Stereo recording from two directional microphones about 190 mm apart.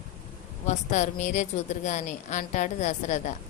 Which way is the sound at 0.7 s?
40° left (ahead or behind).